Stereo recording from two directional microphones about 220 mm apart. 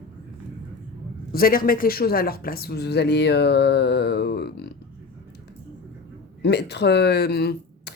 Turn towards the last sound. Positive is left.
turn(degrees=45)  # may be behind; listen again after turning